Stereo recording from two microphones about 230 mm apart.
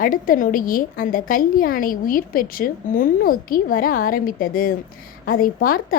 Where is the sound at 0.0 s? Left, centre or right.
Left.